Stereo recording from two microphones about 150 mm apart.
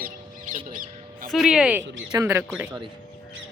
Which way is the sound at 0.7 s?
60° right (ahead or behind).